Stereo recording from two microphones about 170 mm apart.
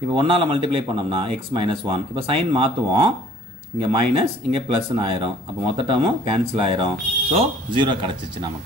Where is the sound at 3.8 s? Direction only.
30° right (ahead or behind).